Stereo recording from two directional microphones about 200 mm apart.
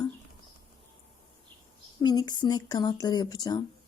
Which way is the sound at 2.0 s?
20° left (ahead or behind).